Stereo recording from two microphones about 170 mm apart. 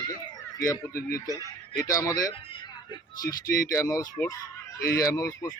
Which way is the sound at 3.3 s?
60° left (ahead or behind).